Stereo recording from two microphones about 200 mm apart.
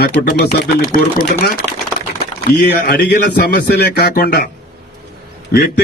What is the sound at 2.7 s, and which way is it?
A man's voice, 50° left (ahead or behind).